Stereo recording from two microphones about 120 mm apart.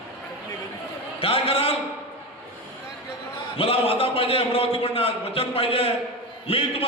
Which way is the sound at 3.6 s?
50° left (ahead or behind).